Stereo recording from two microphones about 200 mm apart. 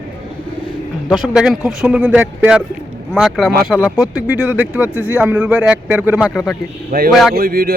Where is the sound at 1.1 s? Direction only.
Centre (ahead or behind).